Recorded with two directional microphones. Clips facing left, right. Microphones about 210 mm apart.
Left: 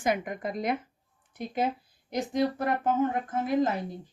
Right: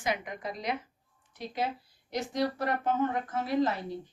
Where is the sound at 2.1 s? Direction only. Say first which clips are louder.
Left 3 dB; 50° left (ahead or behind).